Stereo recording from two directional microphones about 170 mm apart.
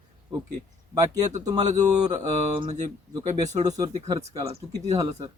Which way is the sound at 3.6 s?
20° right (ahead or behind).